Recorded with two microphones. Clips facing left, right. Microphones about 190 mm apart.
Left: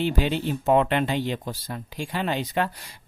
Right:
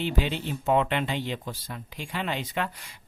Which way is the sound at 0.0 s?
40° left (ahead or behind).